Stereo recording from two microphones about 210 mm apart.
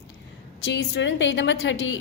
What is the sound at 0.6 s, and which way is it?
A woman's voice, 55° left (ahead or behind).